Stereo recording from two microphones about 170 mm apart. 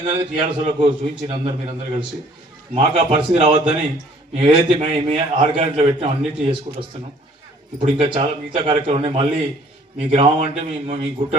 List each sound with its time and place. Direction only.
0.0 s a man's voice: 35° right (ahead or behind)